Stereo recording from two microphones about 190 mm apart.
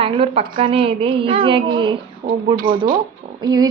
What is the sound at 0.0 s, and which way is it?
A woman's voice, 30° right (ahead or behind).